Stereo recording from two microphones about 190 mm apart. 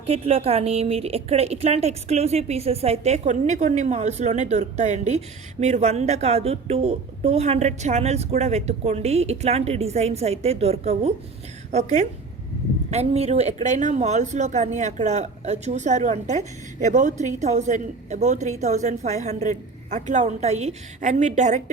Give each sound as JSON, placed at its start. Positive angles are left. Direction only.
{"t": 0.0, "sound": "a woman's voice", "side_deg": -30}